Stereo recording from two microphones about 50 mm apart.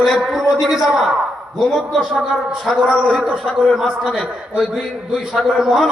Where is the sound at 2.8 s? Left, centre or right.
Centre.